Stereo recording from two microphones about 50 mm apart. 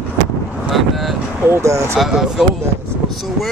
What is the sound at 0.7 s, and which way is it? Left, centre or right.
Speech, centre.